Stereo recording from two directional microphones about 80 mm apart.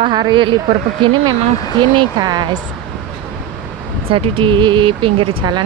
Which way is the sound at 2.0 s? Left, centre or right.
Right.